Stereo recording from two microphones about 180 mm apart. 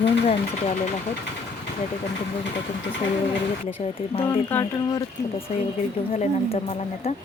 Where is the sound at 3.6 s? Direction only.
30° left (ahead or behind).